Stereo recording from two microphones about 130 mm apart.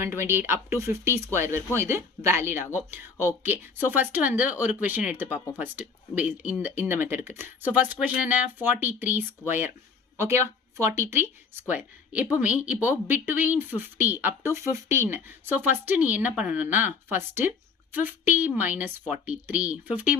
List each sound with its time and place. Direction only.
0.0 s speech: 20° right (ahead or behind)